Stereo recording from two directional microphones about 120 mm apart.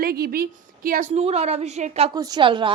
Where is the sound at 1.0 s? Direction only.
65° right (ahead or behind).